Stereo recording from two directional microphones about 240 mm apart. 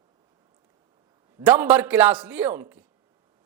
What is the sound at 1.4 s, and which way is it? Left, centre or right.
A man's voice, centre.